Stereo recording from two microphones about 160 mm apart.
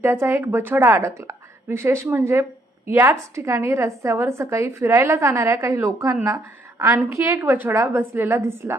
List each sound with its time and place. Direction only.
0.0 s a woman's voice: 15° right (ahead or behind)